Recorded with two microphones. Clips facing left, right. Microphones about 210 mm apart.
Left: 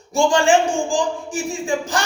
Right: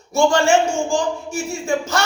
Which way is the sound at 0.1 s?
15° left (ahead or behind).